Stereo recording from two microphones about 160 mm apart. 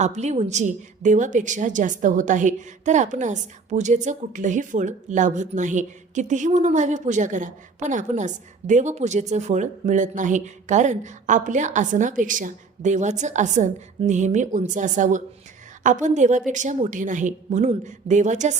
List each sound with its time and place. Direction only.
0.0 s a woman's voice: 45° right (ahead or behind)